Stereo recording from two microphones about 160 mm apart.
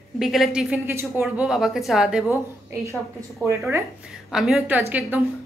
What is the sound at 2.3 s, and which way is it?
A woman's voice, 15° right (ahead or behind).